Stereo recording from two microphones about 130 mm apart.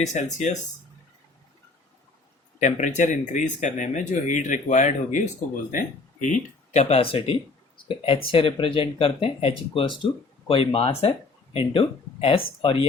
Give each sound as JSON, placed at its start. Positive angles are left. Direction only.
{"t": 0.0, "sound": "speech", "side_deg": 65}
{"t": 2.6, "sound": "speech", "side_deg": 70}
{"t": 5.7, "sound": "speech", "side_deg": 90}